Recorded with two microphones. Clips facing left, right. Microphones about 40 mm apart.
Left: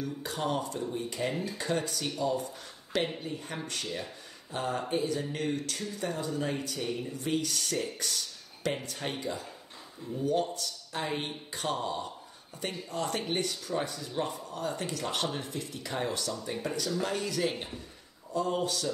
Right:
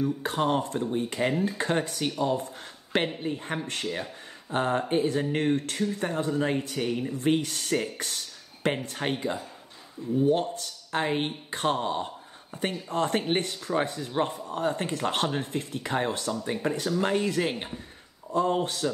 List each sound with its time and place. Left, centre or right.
0.0 s speech: right
6.9 s speech: right
7.2 s speech: right
8.0 s a sound: right
8.8 s speech: right
10.5 s speech: right